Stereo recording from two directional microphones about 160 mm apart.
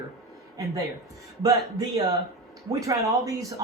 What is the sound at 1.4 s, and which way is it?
Speech, 25° right (ahead or behind).